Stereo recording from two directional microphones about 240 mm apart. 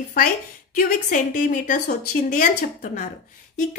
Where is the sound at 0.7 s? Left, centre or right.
Left.